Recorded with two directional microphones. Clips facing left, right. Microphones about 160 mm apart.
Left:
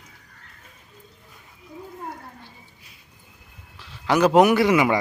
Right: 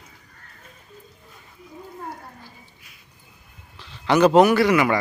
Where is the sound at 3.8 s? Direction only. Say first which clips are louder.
Right 2 dB; 5° left (ahead or behind).